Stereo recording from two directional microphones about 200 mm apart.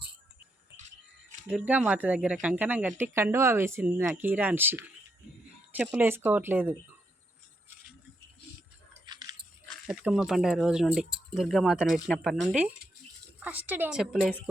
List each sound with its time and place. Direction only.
1.5 s speech: 5° right (ahead or behind)
9.0 s a sound: 20° right (ahead or behind)
9.6 s speech: 5° right (ahead or behind)